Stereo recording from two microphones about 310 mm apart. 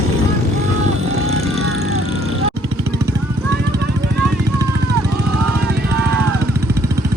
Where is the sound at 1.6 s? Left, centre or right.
Right.